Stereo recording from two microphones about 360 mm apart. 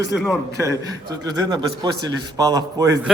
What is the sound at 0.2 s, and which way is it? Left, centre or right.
A man's voice, centre.